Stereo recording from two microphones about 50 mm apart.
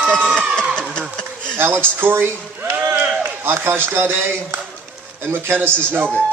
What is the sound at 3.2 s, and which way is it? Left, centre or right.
A man's voice, right.